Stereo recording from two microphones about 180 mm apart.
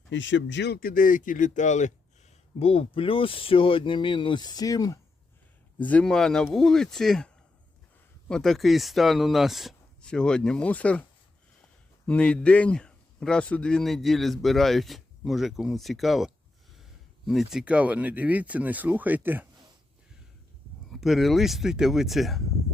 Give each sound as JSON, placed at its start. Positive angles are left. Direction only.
{"t": 0.1, "sound": "speech", "side_deg": 90}
{"t": 5.8, "sound": "speech", "side_deg": 10}
{"t": 12.0, "sound": "speech", "side_deg": 5}
{"t": 20.9, "sound": "speech", "side_deg": 0}